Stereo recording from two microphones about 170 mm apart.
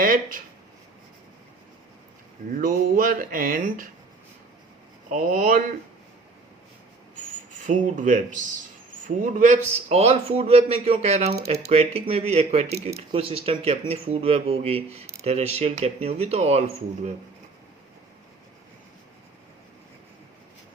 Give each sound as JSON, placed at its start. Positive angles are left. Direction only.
{"t": 0.0, "sound": "speech", "side_deg": -55}
{"t": 2.6, "sound": "speech", "side_deg": -55}
{"t": 5.0, "sound": "speech", "side_deg": -50}
{"t": 7.7, "sound": "a man's voice", "side_deg": -50}